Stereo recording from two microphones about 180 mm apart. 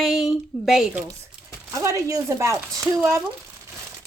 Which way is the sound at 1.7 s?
15° right (ahead or behind).